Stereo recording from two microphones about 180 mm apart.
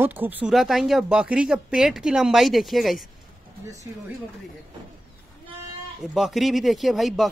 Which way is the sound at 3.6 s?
20° right (ahead or behind).